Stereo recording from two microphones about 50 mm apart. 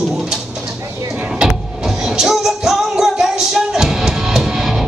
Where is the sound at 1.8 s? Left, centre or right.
Centre.